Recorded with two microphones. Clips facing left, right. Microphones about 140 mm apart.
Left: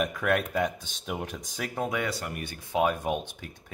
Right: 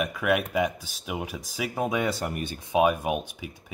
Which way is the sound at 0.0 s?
5° right (ahead or behind).